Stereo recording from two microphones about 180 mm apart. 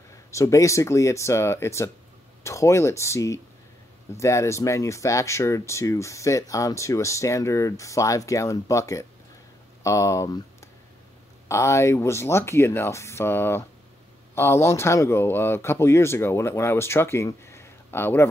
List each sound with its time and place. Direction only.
0.3 s speech: 15° left (ahead or behind)